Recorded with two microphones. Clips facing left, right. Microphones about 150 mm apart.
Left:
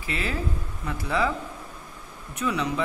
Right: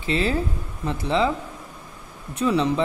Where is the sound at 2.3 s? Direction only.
30° right (ahead or behind).